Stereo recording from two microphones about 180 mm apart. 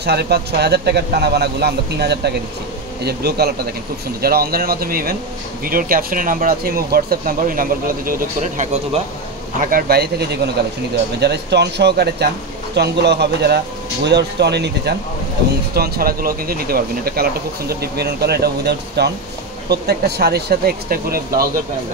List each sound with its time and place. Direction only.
0.0 s speech: 65° right (ahead or behind)
15.7 s speech: 60° right (ahead or behind)